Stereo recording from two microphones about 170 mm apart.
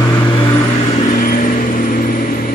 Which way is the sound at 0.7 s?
45° left (ahead or behind).